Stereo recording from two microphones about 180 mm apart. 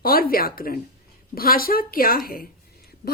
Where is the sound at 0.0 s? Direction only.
55° left (ahead or behind).